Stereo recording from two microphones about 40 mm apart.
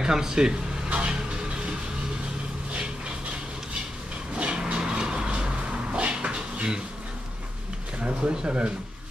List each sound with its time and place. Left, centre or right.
0.0 s speech: centre
0.8 s vehicle: right
4.4 s a sound: right
8.0 s speech: right